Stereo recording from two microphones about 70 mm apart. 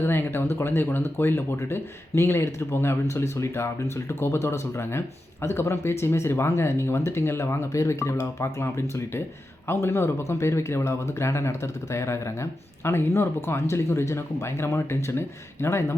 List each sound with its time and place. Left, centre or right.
0.0 s speech: left
8.6 s speech: left